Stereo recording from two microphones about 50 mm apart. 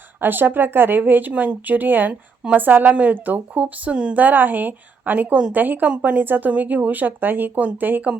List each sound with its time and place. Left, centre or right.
0.2 s speech: right
4.2 s speech: right